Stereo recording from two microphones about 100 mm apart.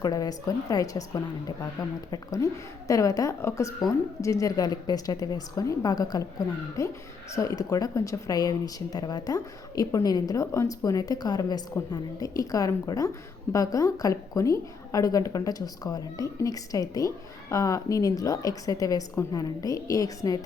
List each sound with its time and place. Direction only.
0.0 s speech: 40° left (ahead or behind)